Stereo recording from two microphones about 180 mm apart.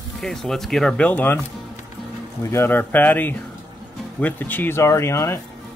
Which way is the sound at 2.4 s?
15° left (ahead or behind).